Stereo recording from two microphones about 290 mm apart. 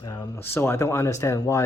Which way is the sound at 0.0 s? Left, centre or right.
Centre.